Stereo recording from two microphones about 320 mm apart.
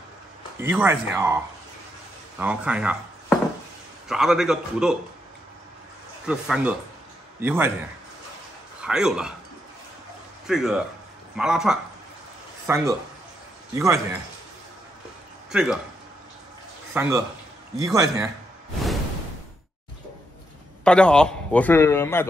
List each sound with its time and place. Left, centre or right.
0.6 s a man's voice: centre
6.2 s a man's voice: centre
8.8 s a man's voice: centre
10.4 s a man's voice: centre
15.5 s a man's voice: centre
16.9 s a man's voice: centre
20.8 s a man's voice: centre